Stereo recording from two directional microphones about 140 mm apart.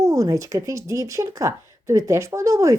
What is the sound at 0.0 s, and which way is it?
Speech, 25° right (ahead or behind).